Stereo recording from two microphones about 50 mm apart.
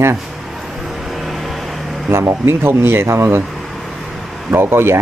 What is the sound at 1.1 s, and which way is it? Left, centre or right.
Vehicle, centre.